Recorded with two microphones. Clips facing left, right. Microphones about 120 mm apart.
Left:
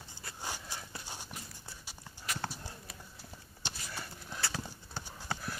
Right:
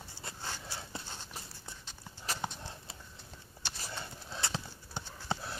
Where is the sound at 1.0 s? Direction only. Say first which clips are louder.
Left 1 dB; 10° left (ahead or behind).